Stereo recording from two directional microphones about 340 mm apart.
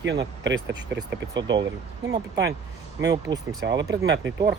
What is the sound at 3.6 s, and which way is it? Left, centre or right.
Speech, right.